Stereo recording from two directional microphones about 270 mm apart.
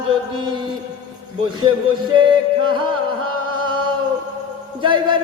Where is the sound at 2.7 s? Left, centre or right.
Centre.